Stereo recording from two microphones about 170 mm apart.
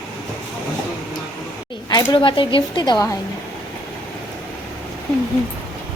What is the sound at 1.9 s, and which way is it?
A woman's voice, 25° left (ahead or behind).